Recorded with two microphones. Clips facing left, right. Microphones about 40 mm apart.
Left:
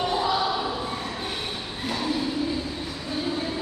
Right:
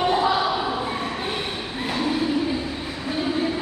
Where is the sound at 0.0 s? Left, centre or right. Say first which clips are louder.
Right 4 dB; right.